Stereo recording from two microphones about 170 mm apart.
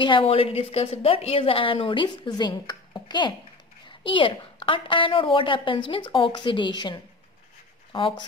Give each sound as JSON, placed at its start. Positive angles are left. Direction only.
{"t": 0.0, "sound": "a woman's voice", "side_deg": 30}